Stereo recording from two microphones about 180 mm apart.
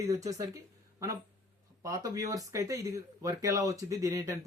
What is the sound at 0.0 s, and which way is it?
Speech, 20° right (ahead or behind).